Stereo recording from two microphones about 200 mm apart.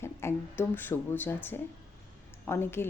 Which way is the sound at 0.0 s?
10° left (ahead or behind).